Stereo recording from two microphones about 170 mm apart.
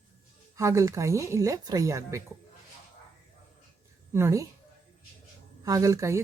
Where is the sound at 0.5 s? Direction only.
20° right (ahead or behind).